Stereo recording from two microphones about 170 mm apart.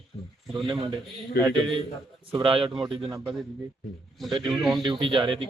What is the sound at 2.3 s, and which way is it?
Speech, 30° right (ahead or behind).